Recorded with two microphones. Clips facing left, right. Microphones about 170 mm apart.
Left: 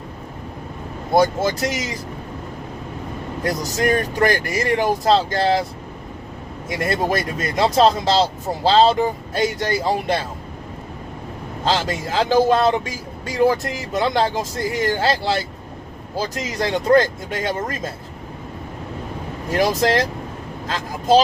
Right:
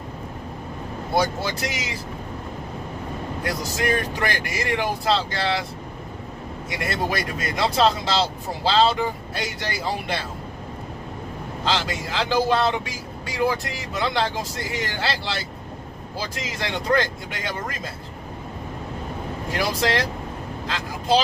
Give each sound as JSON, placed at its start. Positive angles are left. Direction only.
{"t": 1.1, "sound": "speech", "side_deg": 45}
{"t": 3.4, "sound": "speech", "side_deg": 45}
{"t": 6.7, "sound": "speech", "side_deg": 45}
{"t": 11.6, "sound": "speech", "side_deg": 45}
{"t": 19.5, "sound": "speech", "side_deg": 45}